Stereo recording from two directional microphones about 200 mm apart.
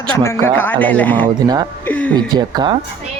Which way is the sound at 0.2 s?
10° left (ahead or behind).